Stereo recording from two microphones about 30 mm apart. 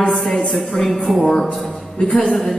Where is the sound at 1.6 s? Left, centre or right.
Centre.